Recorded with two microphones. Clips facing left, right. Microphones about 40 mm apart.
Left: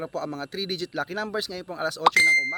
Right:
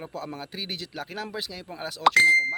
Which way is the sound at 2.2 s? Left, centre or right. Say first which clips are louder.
Right 1 dB; centre.